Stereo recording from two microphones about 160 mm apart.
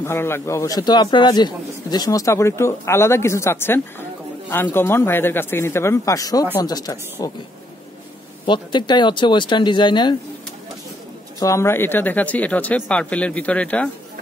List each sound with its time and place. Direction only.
0.0 s a man's voice: 15° left (ahead or behind)
8.5 s speech: 30° left (ahead or behind)
11.3 s a man's voice: 20° left (ahead or behind)